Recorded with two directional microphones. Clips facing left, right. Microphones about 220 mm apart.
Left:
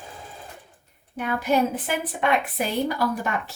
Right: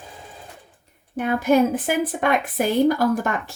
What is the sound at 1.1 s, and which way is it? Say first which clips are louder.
Speech: right 5 dB; 50° right (ahead or behind).